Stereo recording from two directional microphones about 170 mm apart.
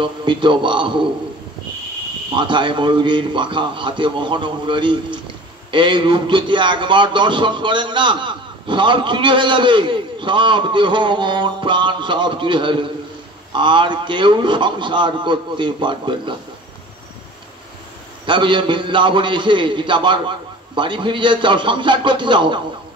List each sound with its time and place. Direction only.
0.0 s a man's voice: 30° right (ahead or behind)
2.3 s a man's voice: 30° right (ahead or behind)
18.2 s a man's voice: 30° right (ahead or behind)